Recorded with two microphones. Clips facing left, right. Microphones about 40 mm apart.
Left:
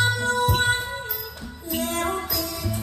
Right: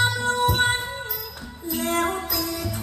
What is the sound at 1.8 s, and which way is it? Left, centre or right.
Music, right.